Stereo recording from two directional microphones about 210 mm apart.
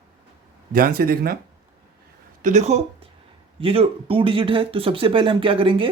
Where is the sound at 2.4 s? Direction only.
35° right (ahead or behind).